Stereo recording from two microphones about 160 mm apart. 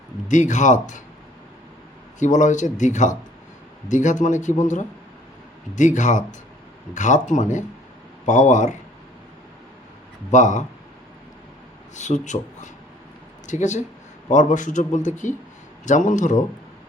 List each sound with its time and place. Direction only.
0.3 s a man's voice: 50° left (ahead or behind)
2.1 s a man's voice: 50° left (ahead or behind)
10.3 s a man's voice: 50° left (ahead or behind)
11.9 s a man's voice: 50° left (ahead or behind)